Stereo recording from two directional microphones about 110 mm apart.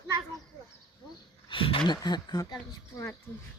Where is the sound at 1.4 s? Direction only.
50° left (ahead or behind).